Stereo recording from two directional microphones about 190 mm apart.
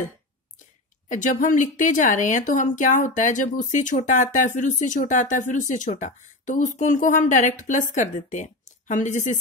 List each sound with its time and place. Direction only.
1.0 s a woman's voice: 40° left (ahead or behind)